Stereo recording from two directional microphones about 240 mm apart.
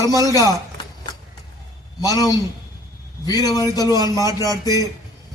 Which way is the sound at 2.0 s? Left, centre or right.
Centre.